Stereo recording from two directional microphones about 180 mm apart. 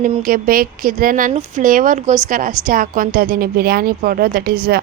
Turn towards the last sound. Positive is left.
turn(degrees=-65)  # may be behind; listen again after turning